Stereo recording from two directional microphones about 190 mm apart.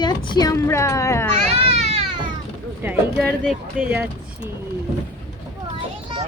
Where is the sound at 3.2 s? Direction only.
5° left (ahead or behind).